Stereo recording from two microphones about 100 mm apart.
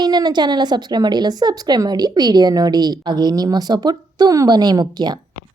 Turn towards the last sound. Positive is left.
turn(degrees=-45)  # may be behind; listen again after turning